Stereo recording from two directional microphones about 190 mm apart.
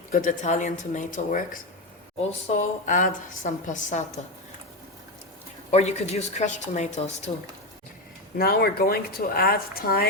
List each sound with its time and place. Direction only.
0.1 s speech: 45° left (ahead or behind)
2.5 s a woman's voice: 40° left (ahead or behind)
5.7 s a woman's voice: 35° left (ahead or behind)
8.4 s speech: 55° left (ahead or behind)